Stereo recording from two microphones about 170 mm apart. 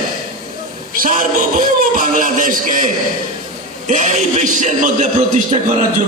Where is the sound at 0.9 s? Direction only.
55° right (ahead or behind).